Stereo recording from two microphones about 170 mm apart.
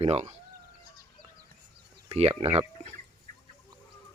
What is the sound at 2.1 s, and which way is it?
Speech, 35° right (ahead or behind).